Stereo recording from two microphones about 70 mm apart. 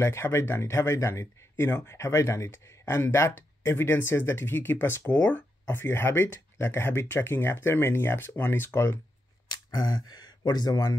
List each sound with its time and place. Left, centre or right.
0.0 s speech: left
9.5 s speech: left